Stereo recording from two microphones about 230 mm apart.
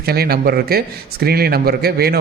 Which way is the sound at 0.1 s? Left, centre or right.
Right.